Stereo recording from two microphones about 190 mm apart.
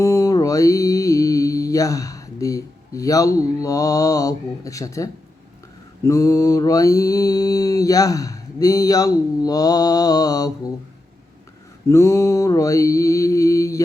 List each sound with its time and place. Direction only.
0.0 s mantra: 15° left (ahead or behind)
6.1 s mantra: 15° left (ahead or behind)
11.9 s mantra: 15° left (ahead or behind)